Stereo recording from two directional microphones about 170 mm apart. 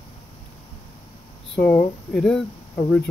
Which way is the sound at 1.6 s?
10° left (ahead or behind).